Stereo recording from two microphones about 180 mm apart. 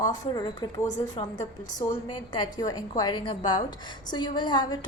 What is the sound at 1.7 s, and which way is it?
A woman's voice, 25° left (ahead or behind).